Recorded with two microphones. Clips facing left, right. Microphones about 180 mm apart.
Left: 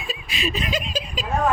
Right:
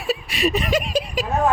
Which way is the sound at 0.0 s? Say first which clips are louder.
Right 7 dB; 70° right (ahead or behind).